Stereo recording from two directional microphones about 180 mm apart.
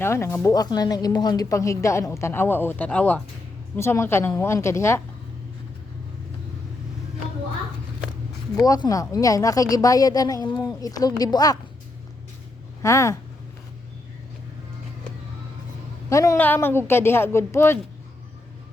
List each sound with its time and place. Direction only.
0.0 s speech: 15° left (ahead or behind)
8.6 s speech: 20° left (ahead or behind)
12.8 s speech: 15° left (ahead or behind)
16.0 s speech: 15° left (ahead or behind)